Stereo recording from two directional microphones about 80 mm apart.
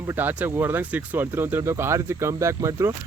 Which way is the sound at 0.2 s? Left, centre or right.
Right.